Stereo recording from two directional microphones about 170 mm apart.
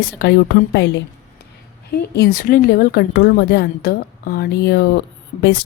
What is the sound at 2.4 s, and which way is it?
A woman's voice, 55° left (ahead or behind).